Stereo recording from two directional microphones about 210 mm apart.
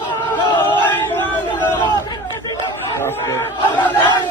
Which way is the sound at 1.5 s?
20° left (ahead or behind).